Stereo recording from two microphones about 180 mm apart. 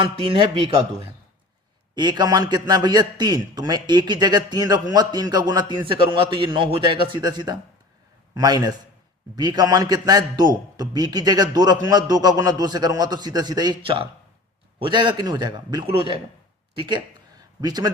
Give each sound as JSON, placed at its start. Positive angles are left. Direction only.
{"t": 0.0, "sound": "a man's voice", "side_deg": -30}
{"t": 2.0, "sound": "a man's voice", "side_deg": -25}